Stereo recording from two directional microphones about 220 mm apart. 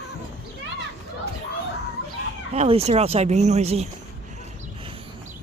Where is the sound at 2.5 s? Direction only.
25° right (ahead or behind).